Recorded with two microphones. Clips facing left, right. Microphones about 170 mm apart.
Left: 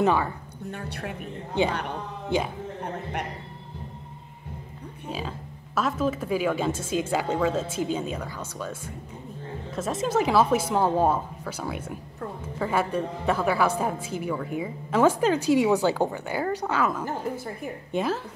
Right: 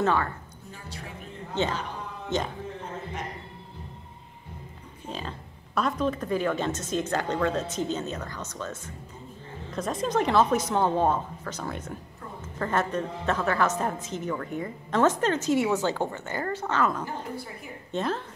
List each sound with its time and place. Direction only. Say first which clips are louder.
0.0 s a woman's voice: left 3 dB; 15° left (ahead or behind)
0.7 s a woman's voice: left 8 dB; 65° left (ahead or behind)
2.3 s a woman's voice: left 3 dB; 10° left (ahead or behind)
2.8 s a sound: left 4 dB; 65° left (ahead or behind)
5.8 s a woman's voice: left 1 dB; 5° left (ahead or behind)